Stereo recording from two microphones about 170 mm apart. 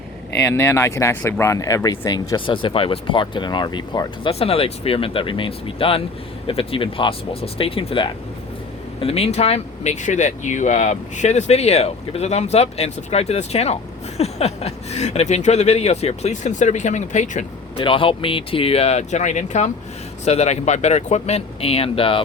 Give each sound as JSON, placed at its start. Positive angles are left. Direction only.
{"t": 0.4, "sound": "speech", "side_deg": 10}
{"t": 17.7, "sound": "speech", "side_deg": 30}